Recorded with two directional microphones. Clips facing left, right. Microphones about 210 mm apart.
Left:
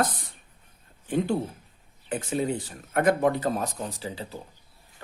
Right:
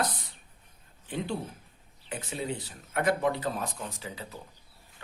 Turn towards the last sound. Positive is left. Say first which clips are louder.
# left 5 dB
turn(degrees=30)  # may be behind; listen again after turning